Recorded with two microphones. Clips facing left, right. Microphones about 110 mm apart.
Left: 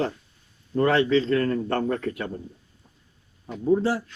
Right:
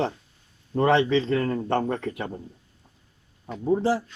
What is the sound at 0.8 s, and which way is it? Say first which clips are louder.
Speech: even; 20° right (ahead or behind).